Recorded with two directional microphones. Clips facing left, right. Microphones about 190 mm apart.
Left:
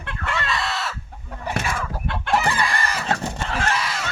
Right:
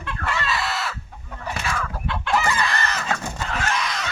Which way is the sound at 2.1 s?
55° left (ahead or behind).